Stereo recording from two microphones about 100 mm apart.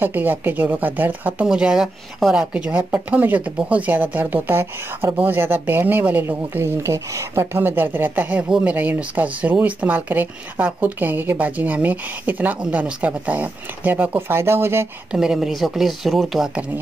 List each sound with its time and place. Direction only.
0.0 s speech: 20° right (ahead or behind)
15.0 s speech: 5° right (ahead or behind)